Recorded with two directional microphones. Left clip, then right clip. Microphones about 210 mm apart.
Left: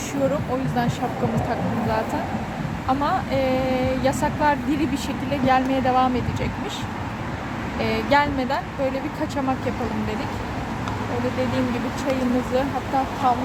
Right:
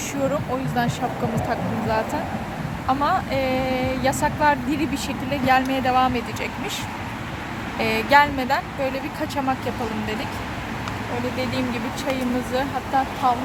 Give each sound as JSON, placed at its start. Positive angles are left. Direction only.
{"t": 3.0, "sound": "speech", "side_deg": -15}
{"t": 7.8, "sound": "speech", "side_deg": -15}
{"t": 13.2, "sound": "speech", "side_deg": -25}